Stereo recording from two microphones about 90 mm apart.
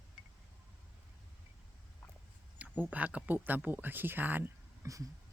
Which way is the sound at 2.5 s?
20° right (ahead or behind).